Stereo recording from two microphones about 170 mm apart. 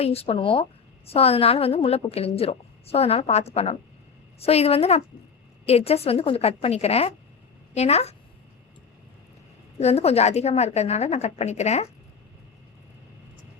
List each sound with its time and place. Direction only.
0.0 s a woman's voice: 35° left (ahead or behind)
9.8 s a woman's voice: 35° left (ahead or behind)